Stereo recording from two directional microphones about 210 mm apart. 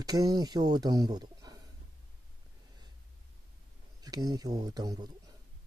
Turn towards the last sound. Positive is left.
turn(degrees=-20)  # may be behind; listen again after turning